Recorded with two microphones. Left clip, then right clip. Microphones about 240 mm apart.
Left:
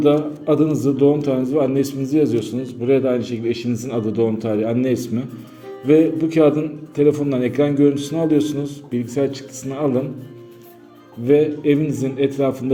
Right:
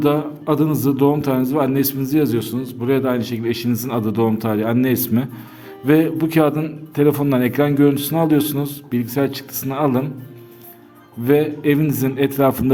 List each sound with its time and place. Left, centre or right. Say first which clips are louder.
0.0 s a man's voice: left 2 dB; right
11.3 s a man's voice: left 1 dB; right